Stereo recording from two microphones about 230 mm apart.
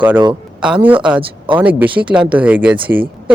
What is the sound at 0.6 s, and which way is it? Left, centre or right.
Speech, centre.